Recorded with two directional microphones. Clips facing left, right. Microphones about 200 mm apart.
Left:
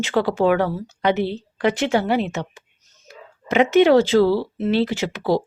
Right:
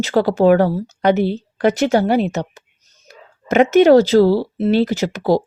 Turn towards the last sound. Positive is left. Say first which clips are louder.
# right 4 dB
turn(degrees=-40)  # may be behind; listen again after turning